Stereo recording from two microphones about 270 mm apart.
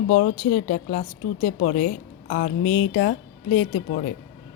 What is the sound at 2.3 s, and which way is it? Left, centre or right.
Speech, left.